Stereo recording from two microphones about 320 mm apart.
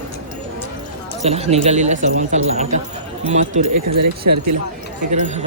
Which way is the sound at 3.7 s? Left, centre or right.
Right.